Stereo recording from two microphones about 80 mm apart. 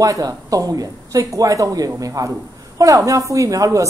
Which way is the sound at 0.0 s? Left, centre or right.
Right.